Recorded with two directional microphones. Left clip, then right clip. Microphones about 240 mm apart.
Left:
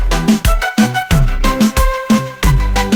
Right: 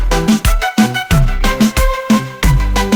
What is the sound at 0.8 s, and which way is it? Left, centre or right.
Music, centre.